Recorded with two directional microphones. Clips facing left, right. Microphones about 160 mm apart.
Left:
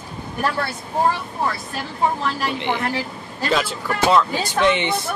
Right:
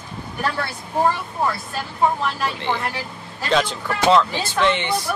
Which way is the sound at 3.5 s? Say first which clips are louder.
Right 1 dB; 5° left (ahead or behind).